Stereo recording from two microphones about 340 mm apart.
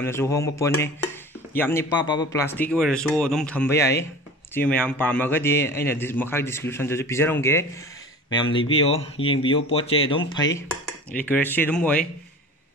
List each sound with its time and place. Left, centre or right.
0.0 s a man's voice: centre
10.5 s speech: centre